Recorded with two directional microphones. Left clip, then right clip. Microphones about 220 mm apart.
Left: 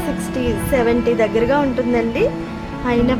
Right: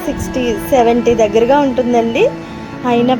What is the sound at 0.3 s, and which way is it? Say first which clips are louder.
A woman's voice: right 6 dB; 10° right (ahead or behind).